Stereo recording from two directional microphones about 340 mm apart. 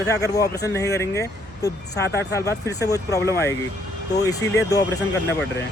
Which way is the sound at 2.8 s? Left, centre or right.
Centre.